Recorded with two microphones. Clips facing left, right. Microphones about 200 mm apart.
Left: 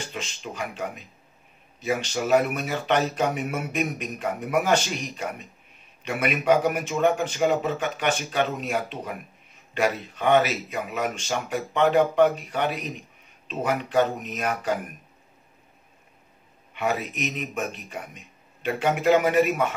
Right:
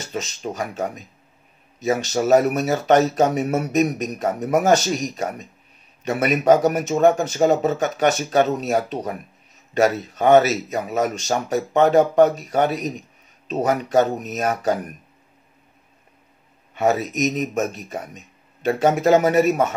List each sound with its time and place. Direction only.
0.0 s speech: 40° right (ahead or behind)
16.7 s speech: 40° right (ahead or behind)